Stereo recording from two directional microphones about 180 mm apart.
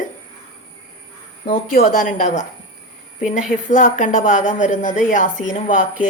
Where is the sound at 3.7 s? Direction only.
45° left (ahead or behind).